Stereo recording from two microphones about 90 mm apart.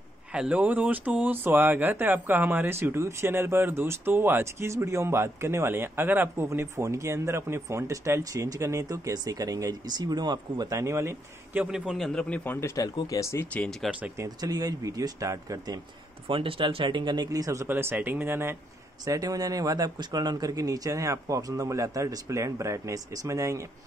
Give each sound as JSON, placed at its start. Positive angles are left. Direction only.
{"t": 0.3, "sound": "speech", "side_deg": -15}
{"t": 11.5, "sound": "a man's voice", "side_deg": -10}
{"t": 12.0, "sound": "speech", "side_deg": 5}
{"t": 12.4, "sound": "speech", "side_deg": 30}
{"t": 13.5, "sound": "speech", "side_deg": 10}
{"t": 14.1, "sound": "speech", "side_deg": -40}
{"t": 16.3, "sound": "speech", "side_deg": -85}
{"t": 17.6, "sound": "speech", "side_deg": -25}
{"t": 19.0, "sound": "speech", "side_deg": -40}